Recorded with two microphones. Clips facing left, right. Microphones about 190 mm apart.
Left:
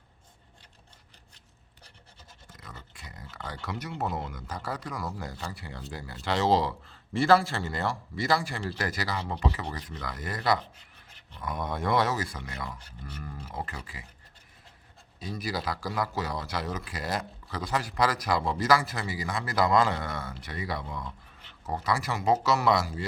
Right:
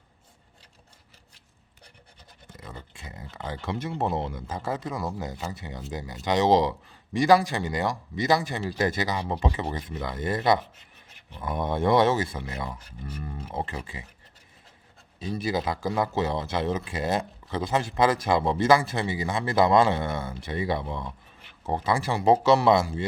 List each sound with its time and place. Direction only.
2.5 s speech: 25° right (ahead or behind)
15.2 s speech: 25° right (ahead or behind)